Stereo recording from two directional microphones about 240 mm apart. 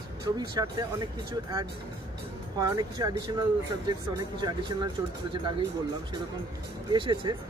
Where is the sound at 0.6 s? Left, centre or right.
Centre.